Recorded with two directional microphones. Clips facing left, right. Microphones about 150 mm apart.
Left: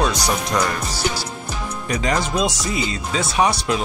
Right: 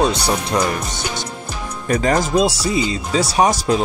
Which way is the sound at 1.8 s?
45° right (ahead or behind).